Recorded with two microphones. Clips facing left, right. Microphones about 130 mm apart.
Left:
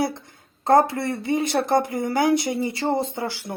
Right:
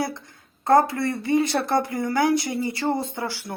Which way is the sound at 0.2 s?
25° left (ahead or behind).